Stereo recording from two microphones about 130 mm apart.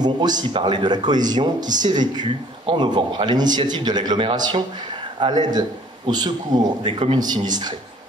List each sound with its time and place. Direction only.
0.0 s speech: 35° right (ahead or behind)